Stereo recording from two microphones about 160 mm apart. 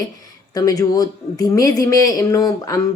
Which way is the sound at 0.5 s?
25° left (ahead or behind).